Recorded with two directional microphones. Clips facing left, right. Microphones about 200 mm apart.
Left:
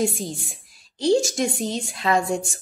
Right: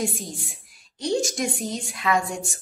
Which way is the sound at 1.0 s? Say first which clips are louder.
Left 5 dB; 30° left (ahead or behind).